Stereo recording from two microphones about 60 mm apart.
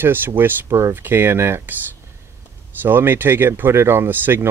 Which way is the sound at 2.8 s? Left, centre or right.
Right.